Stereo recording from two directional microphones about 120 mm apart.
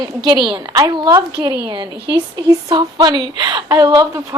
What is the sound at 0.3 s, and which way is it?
Speech, 40° right (ahead or behind).